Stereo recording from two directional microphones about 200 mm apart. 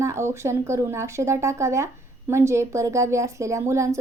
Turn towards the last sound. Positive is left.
turn(degrees=-15)  # may be behind; listen again after turning